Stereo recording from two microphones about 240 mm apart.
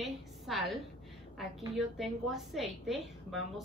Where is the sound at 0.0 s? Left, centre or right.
Centre.